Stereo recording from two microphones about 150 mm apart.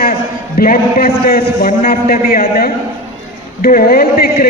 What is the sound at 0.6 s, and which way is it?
A man's voice, 80° left.